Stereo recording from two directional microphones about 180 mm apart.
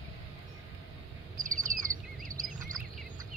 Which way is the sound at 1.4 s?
50° right (ahead or behind).